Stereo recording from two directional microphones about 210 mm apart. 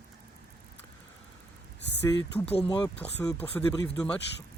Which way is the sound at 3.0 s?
5° left (ahead or behind).